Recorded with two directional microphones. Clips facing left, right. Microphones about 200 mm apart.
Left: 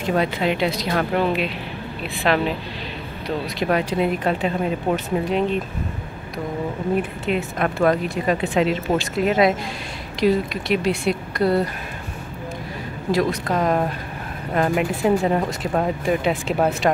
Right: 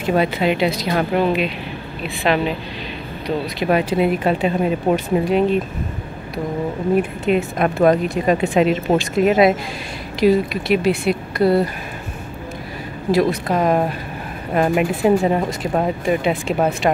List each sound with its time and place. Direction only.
0.0 s speech: 5° right (ahead or behind)
3.6 s speech: 10° right (ahead or behind)
7.2 s speech: 15° right (ahead or behind)
13.1 s speech: 10° right (ahead or behind)